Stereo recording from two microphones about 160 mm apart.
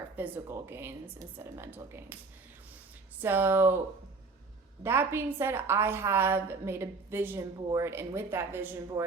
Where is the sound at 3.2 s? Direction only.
15° right (ahead or behind).